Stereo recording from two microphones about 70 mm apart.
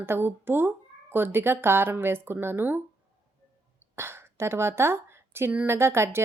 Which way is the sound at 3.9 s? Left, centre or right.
Right.